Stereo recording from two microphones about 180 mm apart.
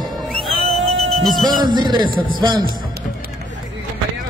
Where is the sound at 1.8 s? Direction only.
25° right (ahead or behind).